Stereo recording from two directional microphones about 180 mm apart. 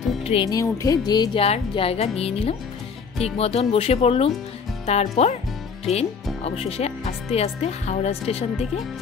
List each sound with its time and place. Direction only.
0.2 s music: 30° left (ahead or behind)
0.5 s speech: 20° left (ahead or behind); by 5.4 s 35° left (ahead or behind)
6.4 s speech: 35° left (ahead or behind)